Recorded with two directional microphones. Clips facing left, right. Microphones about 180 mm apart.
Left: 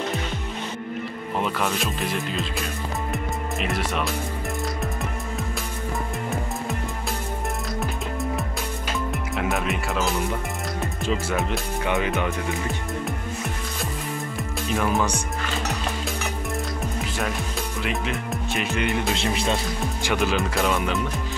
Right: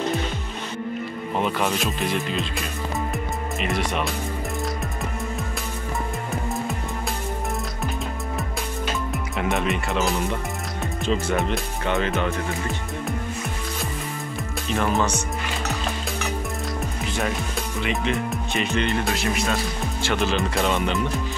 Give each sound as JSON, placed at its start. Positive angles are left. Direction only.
{"t": 1.4, "sound": "speech", "side_deg": 0}
{"t": 3.1, "sound": "music", "side_deg": 0}
{"t": 9.1, "sound": "speech", "side_deg": 0}
{"t": 14.7, "sound": "speech", "side_deg": 5}
{"t": 17.8, "sound": "speech", "side_deg": 0}
{"t": 19.1, "sound": "speech", "side_deg": 25}
{"t": 20.0, "sound": "speech", "side_deg": 10}